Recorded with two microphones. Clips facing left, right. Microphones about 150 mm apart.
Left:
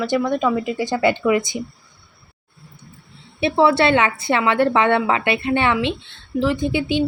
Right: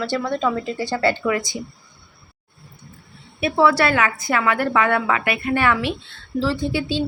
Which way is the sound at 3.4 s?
25° left (ahead or behind).